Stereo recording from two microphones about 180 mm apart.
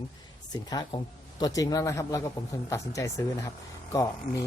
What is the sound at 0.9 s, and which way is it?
Speech, 30° left (ahead or behind).